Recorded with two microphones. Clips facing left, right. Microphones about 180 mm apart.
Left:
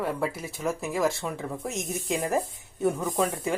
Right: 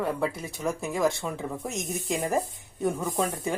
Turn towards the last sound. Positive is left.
turn(degrees=0)  # may be behind; listen again after turning